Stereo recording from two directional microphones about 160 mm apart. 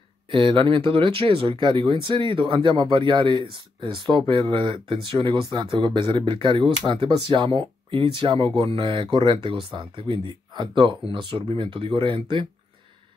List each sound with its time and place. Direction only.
0.3 s speech: 35° right (ahead or behind)